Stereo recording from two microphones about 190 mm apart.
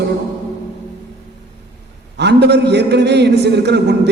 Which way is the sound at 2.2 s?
60° right (ahead or behind).